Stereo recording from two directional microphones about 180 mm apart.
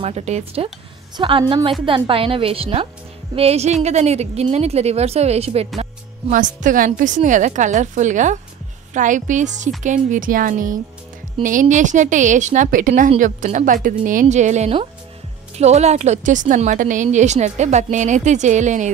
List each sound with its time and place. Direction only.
0.0 s a woman's voice: 35° right (ahead or behind)
6.3 s a woman's voice: 45° right (ahead or behind)